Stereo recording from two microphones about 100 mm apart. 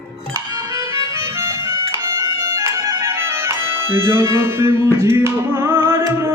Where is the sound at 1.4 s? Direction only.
30° right (ahead or behind).